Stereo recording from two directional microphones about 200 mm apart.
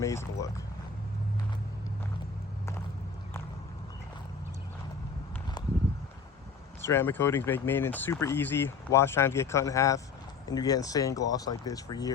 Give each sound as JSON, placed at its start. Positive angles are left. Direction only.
{"t": 0.0, "sound": "speech", "side_deg": 15}
{"t": 5.6, "sound": "a sound", "side_deg": 20}
{"t": 6.8, "sound": "speech", "side_deg": 10}